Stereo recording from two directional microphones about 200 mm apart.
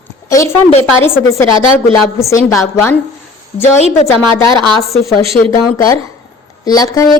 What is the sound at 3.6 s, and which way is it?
Speech, 35° left (ahead or behind).